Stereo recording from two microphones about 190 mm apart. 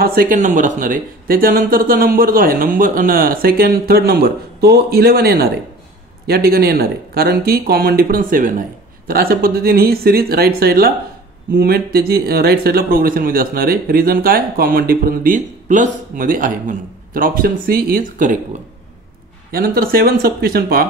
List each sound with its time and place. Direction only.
0.0 s speech: 50° right (ahead or behind)
19.5 s speech: 50° right (ahead or behind)